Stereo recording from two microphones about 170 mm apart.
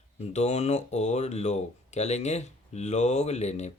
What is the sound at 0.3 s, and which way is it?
Speech, 40° left (ahead or behind).